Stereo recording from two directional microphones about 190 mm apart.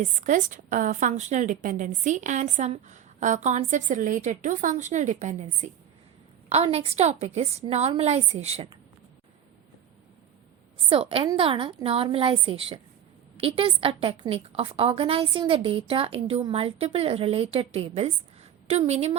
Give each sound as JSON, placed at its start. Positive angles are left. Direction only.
{"t": 0.0, "sound": "a woman's voice", "side_deg": -40}
{"t": 10.8, "sound": "a woman's voice", "side_deg": -30}